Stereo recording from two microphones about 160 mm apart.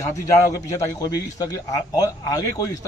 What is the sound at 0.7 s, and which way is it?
Speech, 20° left (ahead or behind).